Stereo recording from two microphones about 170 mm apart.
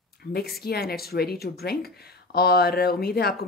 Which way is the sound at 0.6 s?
65° left (ahead or behind).